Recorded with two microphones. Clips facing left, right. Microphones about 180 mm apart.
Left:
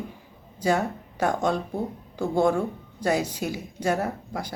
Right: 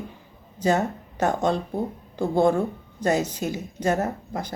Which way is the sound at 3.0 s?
10° left (ahead or behind).